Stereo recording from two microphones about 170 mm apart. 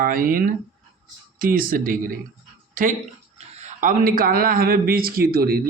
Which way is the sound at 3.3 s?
40° right (ahead or behind).